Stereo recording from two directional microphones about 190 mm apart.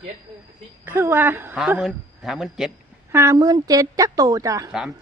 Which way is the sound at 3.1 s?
15° right (ahead or behind).